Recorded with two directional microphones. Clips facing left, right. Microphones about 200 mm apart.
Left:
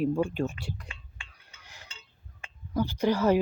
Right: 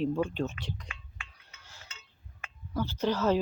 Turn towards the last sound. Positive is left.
turn(degrees=10)  # may be behind; listen again after turning